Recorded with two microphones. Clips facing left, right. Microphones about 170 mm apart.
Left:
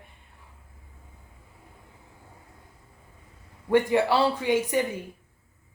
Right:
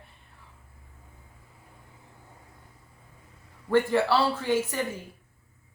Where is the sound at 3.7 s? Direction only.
15° left (ahead or behind).